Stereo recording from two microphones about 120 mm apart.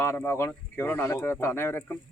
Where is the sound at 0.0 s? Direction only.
20° left (ahead or behind).